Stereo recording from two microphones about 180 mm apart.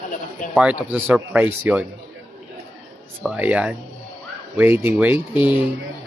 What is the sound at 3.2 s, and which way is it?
Speech, 5° right (ahead or behind).